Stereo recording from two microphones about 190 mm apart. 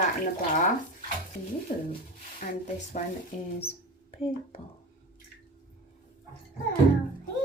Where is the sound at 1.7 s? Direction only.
40° left (ahead or behind).